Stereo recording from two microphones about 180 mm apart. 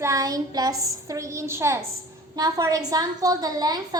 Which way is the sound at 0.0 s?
15° right (ahead or behind).